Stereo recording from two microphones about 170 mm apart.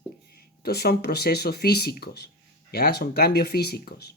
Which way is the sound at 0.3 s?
70° left (ahead or behind).